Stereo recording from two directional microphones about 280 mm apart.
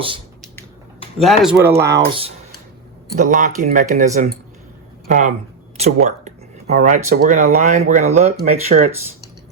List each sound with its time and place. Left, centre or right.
1.2 s speech: centre
3.2 s speech: right